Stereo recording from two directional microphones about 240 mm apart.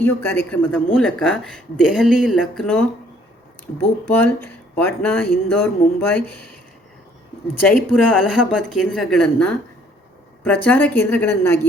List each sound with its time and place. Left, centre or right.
0.0 s a woman's voice: centre
7.6 s a woman's voice: centre